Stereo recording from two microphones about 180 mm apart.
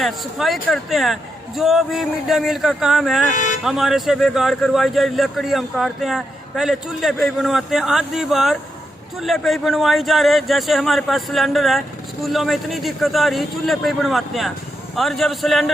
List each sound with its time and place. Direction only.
0.0 s speech: centre (ahead or behind)
3.3 s music: 45° left (ahead or behind)
3.6 s speech: centre (ahead or behind)